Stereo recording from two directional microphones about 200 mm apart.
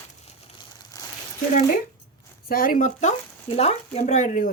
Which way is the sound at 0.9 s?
20° left (ahead or behind).